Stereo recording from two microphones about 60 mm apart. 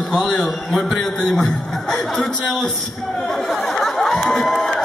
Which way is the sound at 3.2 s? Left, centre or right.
Centre.